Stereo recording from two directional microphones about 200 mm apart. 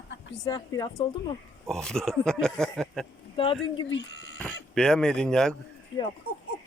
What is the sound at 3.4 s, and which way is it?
Speech, 25° left (ahead or behind).